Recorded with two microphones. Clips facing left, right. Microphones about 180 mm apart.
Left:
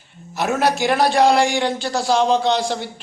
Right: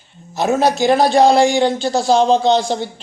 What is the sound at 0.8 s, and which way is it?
A man's voice, 25° right (ahead or behind).